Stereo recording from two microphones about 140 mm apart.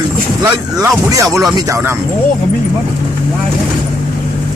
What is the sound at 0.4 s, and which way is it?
Speech, 25° right (ahead or behind).